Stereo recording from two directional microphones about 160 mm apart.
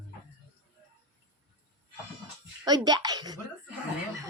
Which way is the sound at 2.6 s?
25° right (ahead or behind).